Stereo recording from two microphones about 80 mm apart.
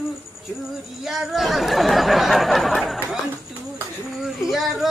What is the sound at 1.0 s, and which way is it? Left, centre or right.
Speech, centre.